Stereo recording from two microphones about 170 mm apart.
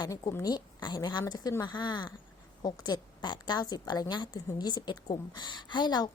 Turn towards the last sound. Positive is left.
turn(degrees=25)  # may be behind; listen again after turning